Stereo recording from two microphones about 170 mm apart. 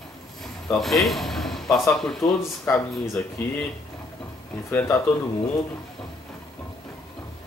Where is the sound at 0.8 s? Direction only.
Centre (ahead or behind).